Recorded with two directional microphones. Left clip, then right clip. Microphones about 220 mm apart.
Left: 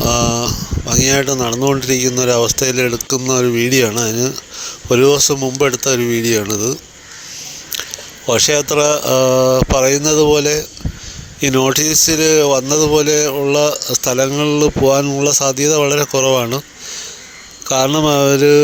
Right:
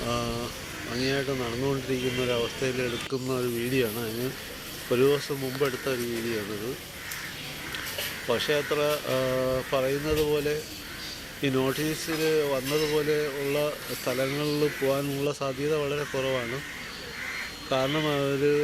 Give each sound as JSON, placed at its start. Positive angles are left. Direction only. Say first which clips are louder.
{"t": 0.0, "sound": "speech", "louder": "left 15 dB", "side_deg": 50}
{"t": 8.3, "sound": "speech", "louder": "left 13 dB", "side_deg": 55}
{"t": 17.7, "sound": "speech", "louder": "left 13 dB", "side_deg": 55}